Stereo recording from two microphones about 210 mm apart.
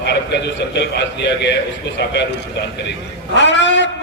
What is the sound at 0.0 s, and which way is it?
A man's voice, 55° left (ahead or behind).